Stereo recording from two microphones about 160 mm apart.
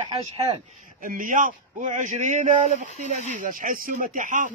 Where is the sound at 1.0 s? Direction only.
60° right (ahead or behind).